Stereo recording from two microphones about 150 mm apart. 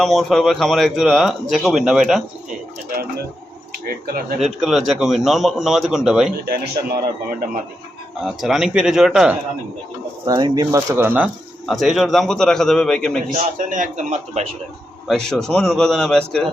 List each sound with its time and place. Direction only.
0.0 s speech: centre (ahead or behind)
2.9 s speech: 90° right
3.8 s speech: 80° right
4.4 s speech: centre (ahead or behind)
6.4 s speech: 90° right
8.2 s speech: centre (ahead or behind)
10.2 s speech: 30° right (ahead or behind)
10.8 s speech: 15° right (ahead or behind)
11.7 s speech: centre (ahead or behind)
13.3 s a man's voice: 60° right (ahead or behind)
15.0 s speech: 5° left (ahead or behind)